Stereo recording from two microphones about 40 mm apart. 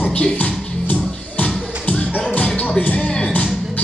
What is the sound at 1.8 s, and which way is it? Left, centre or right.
Music, left.